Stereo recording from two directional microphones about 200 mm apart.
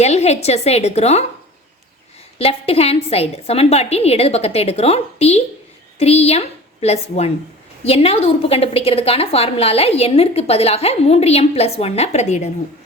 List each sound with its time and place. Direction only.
0.0 s a woman's voice: 35° left (ahead or behind)
2.4 s a woman's voice: 30° left (ahead or behind)